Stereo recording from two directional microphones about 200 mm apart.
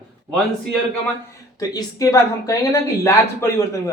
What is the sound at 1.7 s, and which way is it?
Speech, 15° left (ahead or behind).